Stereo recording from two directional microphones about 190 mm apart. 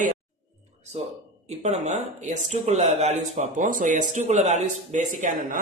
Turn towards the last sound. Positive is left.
turn(degrees=-45)  # may be behind; listen again after turning